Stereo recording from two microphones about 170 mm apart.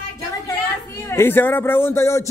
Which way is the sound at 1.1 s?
15° left (ahead or behind).